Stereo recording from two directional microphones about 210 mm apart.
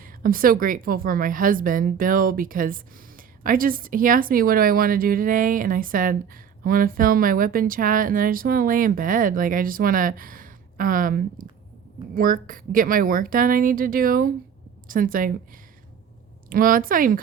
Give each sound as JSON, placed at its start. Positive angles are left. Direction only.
{"t": 0.0, "sound": "a woman's voice", "side_deg": -40}
{"t": 16.5, "sound": "speech", "side_deg": -40}